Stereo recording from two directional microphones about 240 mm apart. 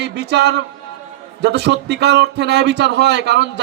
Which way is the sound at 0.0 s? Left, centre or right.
Right.